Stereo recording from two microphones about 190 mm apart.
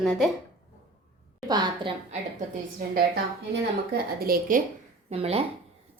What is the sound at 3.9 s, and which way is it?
Speech, 50° right (ahead or behind).